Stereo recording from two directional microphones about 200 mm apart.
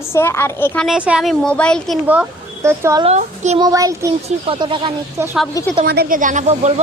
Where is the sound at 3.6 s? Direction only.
15° right (ahead or behind).